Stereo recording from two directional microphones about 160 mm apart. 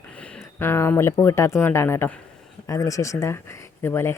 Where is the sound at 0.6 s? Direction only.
15° left (ahead or behind).